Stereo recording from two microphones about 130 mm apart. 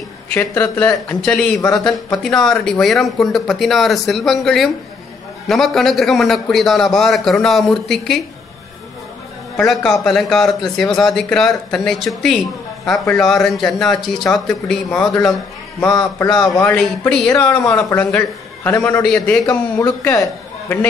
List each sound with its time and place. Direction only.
0.3 s speech: 15° left (ahead or behind)
9.6 s speech: centre (ahead or behind)
15.8 s speech: 25° left (ahead or behind)
16.6 s speech: 10° left (ahead or behind)
17.3 s speech: 20° left (ahead or behind)
17.9 s speech: 15° left (ahead or behind)
19.8 s a man's voice: 20° left (ahead or behind)